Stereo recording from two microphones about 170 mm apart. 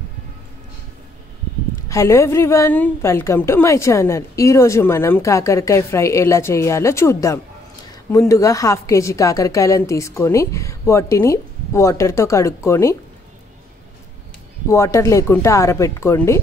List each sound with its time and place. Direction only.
1.9 s a woman's voice: 15° left (ahead or behind)
14.7 s a woman's voice: 15° left (ahead or behind)